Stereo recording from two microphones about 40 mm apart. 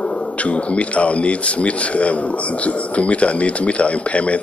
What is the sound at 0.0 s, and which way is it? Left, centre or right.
Speech, left.